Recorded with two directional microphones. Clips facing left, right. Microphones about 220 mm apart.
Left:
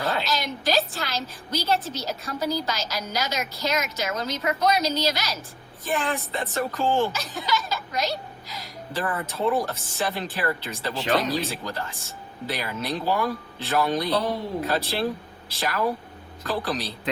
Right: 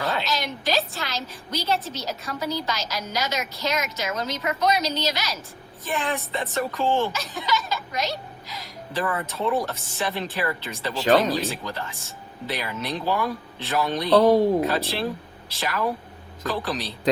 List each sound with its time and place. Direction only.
0.0 s a woman's voice: centre (ahead or behind)
9.1 s a woman's voice: centre (ahead or behind)
14.2 s speech: 45° right (ahead or behind)
14.7 s a woman's voice: centre (ahead or behind)